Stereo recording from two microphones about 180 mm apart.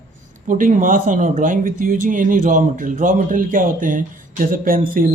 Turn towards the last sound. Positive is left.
turn(degrees=-50)  # may be behind; listen again after turning